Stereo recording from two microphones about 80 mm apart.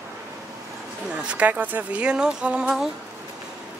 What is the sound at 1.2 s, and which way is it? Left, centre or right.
Speech, centre.